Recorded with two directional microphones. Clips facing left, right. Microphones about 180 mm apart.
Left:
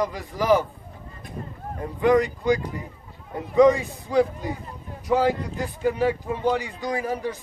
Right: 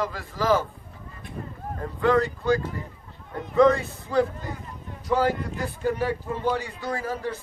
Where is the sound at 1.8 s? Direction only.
15° left (ahead or behind).